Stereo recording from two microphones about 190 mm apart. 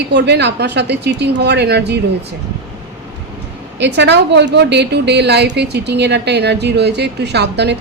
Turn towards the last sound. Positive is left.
turn(degrees=-60)  # may be behind; listen again after turning